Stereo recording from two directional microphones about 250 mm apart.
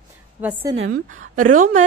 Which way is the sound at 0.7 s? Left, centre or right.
Right.